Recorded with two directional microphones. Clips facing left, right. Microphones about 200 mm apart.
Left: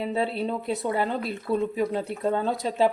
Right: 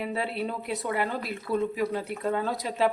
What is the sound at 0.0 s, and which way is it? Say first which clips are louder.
Speech: left 4 dB; 25° left (ahead or behind).